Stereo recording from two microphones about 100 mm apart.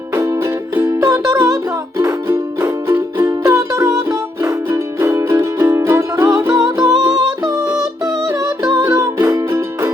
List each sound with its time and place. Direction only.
0.1 s music: 30° right (ahead or behind)